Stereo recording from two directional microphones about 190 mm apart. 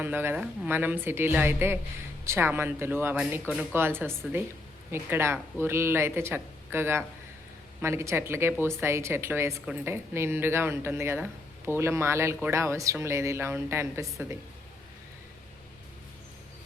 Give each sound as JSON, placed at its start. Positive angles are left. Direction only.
{"t": 0.0, "sound": "speech", "side_deg": -10}